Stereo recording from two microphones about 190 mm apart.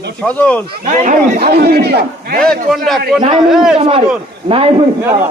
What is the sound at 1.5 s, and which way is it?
Speech, 55° right (ahead or behind).